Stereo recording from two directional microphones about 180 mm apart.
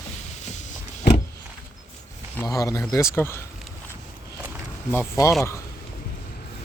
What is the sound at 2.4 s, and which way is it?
Speech, 15° left (ahead or behind).